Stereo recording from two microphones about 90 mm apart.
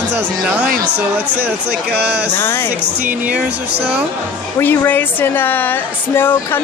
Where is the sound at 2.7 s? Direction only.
15° right (ahead or behind).